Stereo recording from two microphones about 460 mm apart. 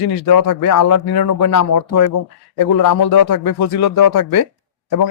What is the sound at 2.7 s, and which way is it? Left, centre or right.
Speech, left.